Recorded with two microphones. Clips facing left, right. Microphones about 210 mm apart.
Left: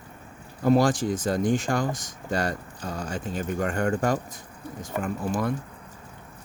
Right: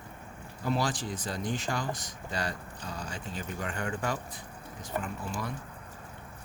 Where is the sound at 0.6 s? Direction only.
45° left (ahead or behind).